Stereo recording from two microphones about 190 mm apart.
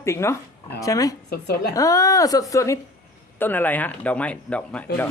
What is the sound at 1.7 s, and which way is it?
Speech, 20° left (ahead or behind).